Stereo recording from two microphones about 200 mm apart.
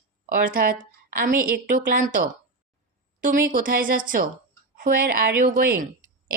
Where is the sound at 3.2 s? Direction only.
45° right (ahead or behind).